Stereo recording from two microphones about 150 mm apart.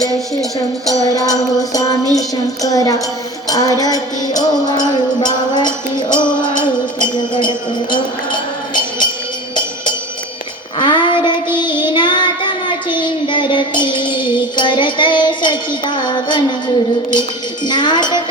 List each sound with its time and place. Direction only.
0.9 s music: 25° left (ahead or behind)
10.8 s child singing: 30° left (ahead or behind)
16.0 s music: 30° left (ahead or behind)
17.7 s music: 30° left (ahead or behind)